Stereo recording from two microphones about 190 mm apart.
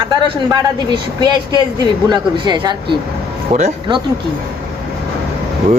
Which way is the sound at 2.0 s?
20° right (ahead or behind).